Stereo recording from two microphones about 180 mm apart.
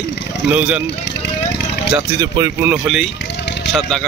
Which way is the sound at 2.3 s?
20° right (ahead or behind).